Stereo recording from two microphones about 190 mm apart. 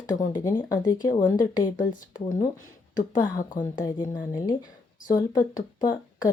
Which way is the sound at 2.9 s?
45° left (ahead or behind).